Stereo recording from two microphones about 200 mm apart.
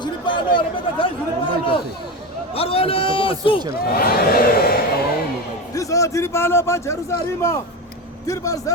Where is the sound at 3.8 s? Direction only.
50° left (ahead or behind).